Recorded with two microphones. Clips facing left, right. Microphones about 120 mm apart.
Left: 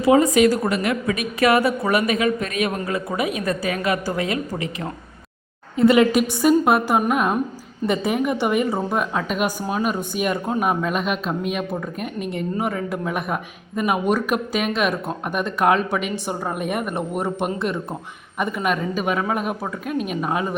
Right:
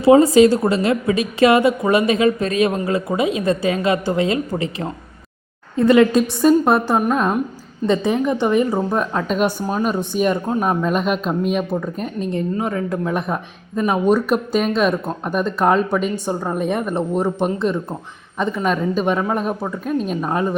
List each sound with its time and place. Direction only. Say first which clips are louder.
0.0 s a woman's voice: right 5 dB; 30° right (ahead or behind)
5.7 s speech: right 2 dB; 15° left (ahead or behind)
18.3 s speech: right 3 dB; 10° left (ahead or behind)